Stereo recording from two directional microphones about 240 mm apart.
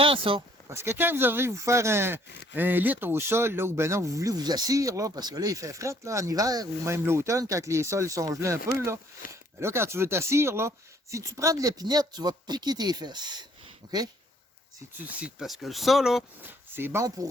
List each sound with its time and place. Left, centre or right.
0.0 s speech: right
0.7 s speech: centre
14.9 s speech: centre